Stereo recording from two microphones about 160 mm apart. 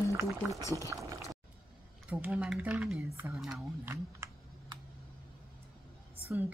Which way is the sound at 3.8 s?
15° right (ahead or behind).